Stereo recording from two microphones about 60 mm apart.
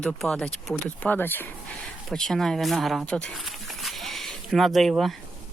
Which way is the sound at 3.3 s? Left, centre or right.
Centre.